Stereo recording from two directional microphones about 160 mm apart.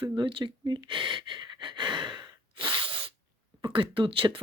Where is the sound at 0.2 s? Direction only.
30° right (ahead or behind).